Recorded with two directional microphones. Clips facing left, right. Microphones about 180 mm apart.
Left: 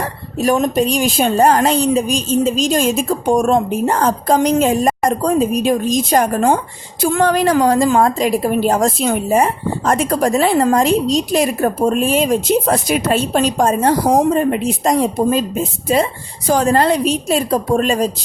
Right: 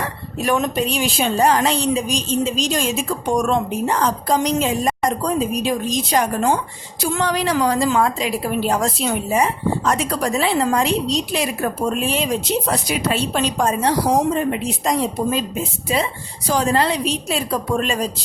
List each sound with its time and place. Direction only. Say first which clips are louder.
0.3 s a woman's voice: left 5 dB; 40° left (ahead or behind)